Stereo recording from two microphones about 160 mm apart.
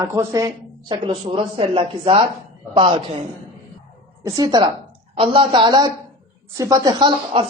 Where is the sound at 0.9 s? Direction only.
30° right (ahead or behind).